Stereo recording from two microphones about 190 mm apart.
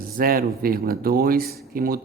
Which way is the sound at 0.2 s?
50° right (ahead or behind).